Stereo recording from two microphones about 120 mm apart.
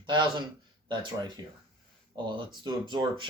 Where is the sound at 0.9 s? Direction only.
40° right (ahead or behind).